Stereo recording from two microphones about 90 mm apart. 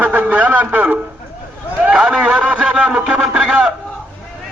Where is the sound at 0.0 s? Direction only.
20° right (ahead or behind).